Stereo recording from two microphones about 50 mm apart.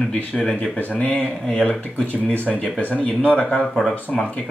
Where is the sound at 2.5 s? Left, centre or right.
Left.